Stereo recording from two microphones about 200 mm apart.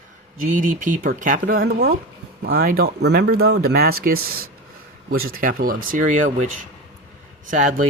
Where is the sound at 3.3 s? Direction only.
90° right.